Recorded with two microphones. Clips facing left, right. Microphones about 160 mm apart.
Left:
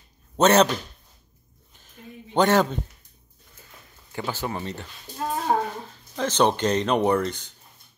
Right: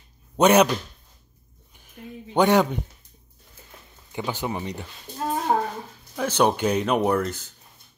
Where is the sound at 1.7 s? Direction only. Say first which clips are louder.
Right 4 dB; 15° right (ahead or behind).